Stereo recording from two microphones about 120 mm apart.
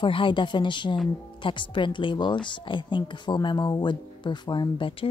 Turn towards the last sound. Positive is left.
turn(degrees=45)  # may be behind; listen again after turning